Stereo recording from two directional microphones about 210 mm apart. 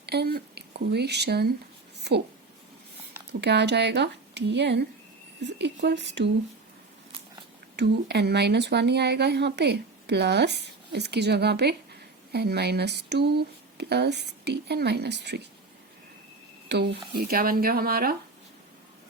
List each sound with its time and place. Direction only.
0.0 s speech: 50° right (ahead or behind)
3.4 s speech: 55° right (ahead or behind)
7.8 s speech: 50° right (ahead or behind)
16.6 s speech: 50° right (ahead or behind)